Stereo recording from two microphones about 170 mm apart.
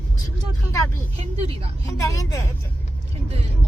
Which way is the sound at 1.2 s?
35° right (ahead or behind).